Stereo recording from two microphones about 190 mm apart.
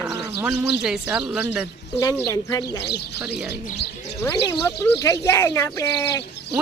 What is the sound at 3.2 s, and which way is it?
Speech, 5° right (ahead or behind).